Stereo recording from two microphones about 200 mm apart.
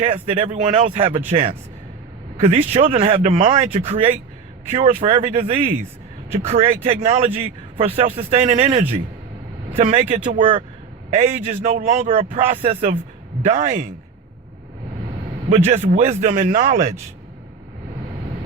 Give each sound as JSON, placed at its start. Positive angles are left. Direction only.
{"t": 0.0, "sound": "a man's voice", "side_deg": -30}
{"t": 15.4, "sound": "a man's voice", "side_deg": -35}